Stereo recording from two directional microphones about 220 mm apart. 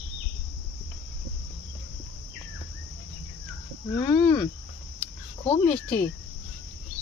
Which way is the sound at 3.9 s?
15° left (ahead or behind).